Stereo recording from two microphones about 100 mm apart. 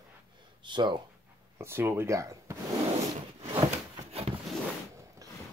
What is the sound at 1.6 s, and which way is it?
Speech, 25° right (ahead or behind).